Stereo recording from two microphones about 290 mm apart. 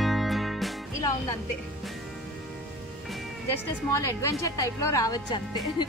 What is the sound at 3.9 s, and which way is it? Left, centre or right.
A woman's voice, centre.